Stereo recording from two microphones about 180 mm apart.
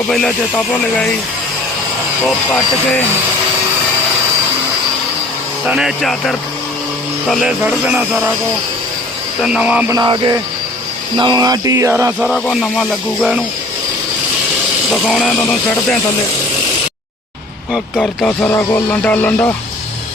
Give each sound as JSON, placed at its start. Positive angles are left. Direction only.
{"t": 0.1, "sound": "music", "side_deg": 5}
{"t": 5.6, "sound": "music", "side_deg": 0}
{"t": 9.4, "sound": "music", "side_deg": -5}
{"t": 9.9, "sound": "speech", "side_deg": -20}
{"t": 12.2, "sound": "music", "side_deg": 0}
{"t": 14.8, "sound": "music", "side_deg": 0}
{"t": 17.7, "sound": "speech", "side_deg": 5}